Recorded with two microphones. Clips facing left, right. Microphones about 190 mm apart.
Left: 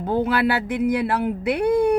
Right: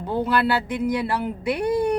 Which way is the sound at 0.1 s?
55° left (ahead or behind).